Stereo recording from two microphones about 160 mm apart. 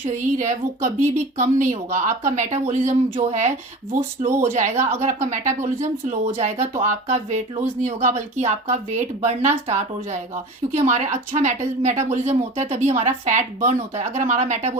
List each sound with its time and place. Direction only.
0.1 s a woman's voice: 50° right (ahead or behind)
4.3 s speech: 15° right (ahead or behind)
4.5 s a woman's voice: 45° right (ahead or behind)